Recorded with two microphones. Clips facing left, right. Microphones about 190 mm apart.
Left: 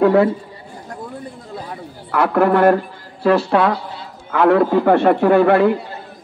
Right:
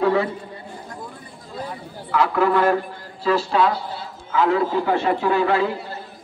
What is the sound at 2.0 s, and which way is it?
Speech, 60° left (ahead or behind).